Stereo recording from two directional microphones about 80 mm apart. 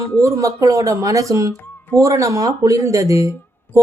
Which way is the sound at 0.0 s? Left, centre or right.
Right.